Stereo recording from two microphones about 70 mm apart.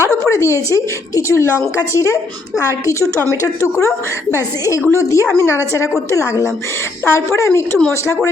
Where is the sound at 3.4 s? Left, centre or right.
Left.